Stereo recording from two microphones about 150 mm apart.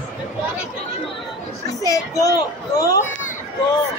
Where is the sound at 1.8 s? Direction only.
25° left (ahead or behind).